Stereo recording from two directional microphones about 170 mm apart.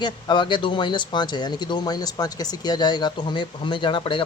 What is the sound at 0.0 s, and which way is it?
Speech, 25° left (ahead or behind).